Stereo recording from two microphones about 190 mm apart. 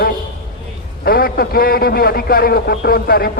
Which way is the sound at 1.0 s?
50° left (ahead or behind).